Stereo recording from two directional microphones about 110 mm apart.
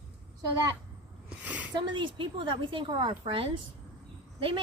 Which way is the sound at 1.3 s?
15° right (ahead or behind).